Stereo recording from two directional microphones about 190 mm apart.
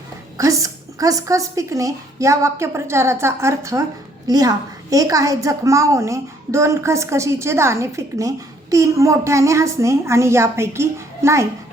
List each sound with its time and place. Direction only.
0.3 s a woman's voice: 15° right (ahead or behind)